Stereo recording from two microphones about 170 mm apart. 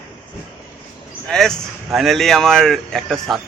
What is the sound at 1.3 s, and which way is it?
A man's voice, 5° left (ahead or behind).